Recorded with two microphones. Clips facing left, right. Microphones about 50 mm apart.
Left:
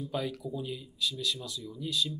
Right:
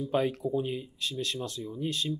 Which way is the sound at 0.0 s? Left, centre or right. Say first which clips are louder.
Right 6 dB; right.